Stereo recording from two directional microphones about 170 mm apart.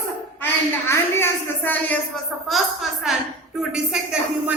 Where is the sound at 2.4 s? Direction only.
Centre (ahead or behind).